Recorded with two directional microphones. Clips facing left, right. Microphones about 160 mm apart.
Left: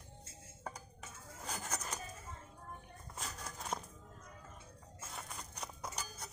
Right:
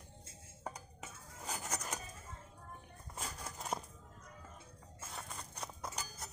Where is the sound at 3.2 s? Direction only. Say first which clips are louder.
Right 1 dB; 5° right (ahead or behind).